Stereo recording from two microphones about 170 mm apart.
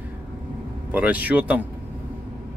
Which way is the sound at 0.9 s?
10° right (ahead or behind).